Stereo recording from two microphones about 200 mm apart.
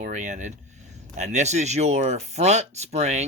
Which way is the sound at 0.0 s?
35° right (ahead or behind).